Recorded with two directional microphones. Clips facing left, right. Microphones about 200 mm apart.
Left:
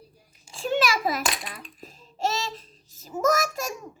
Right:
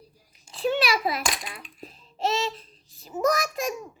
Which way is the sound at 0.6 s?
45° left (ahead or behind).